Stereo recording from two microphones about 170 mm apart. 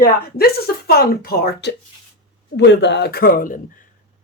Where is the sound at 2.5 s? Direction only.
90° left; by 3.6 s 55° left (ahead or behind).